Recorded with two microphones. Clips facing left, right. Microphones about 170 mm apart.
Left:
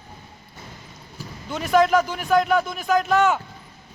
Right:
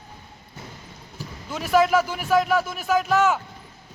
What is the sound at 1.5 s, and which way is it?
Speech, 5° right (ahead or behind).